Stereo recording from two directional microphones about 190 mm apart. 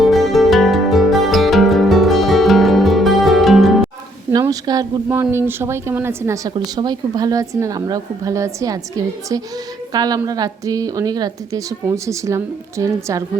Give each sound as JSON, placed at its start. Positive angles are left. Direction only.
{"t": 0.0, "sound": "music", "side_deg": 0}
{"t": 4.3, "sound": "a sound", "side_deg": -20}
{"t": 5.0, "sound": "a woman's voice", "side_deg": -10}
{"t": 9.9, "sound": "a woman's voice", "side_deg": -20}